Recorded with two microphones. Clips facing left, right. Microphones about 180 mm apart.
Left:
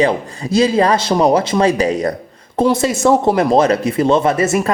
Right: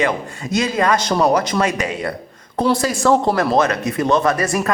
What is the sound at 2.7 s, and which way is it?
Speech, 25° left (ahead or behind).